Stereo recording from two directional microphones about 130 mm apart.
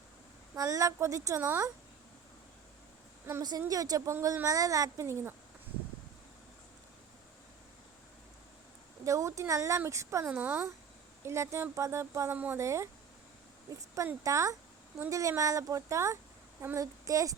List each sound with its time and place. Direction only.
0.5 s speech: 25° right (ahead or behind)
3.7 s speech: 30° right (ahead or behind)
9.0 s speech: 25° right (ahead or behind)
13.9 s speech: 25° right (ahead or behind)